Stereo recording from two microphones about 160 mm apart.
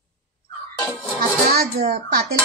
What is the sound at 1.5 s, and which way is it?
Speech, 80° right.